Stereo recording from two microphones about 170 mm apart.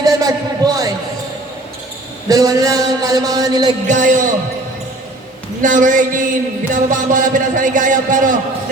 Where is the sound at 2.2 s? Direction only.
20° right (ahead or behind).